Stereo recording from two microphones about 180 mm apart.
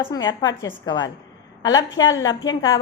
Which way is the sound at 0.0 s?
25° left (ahead or behind).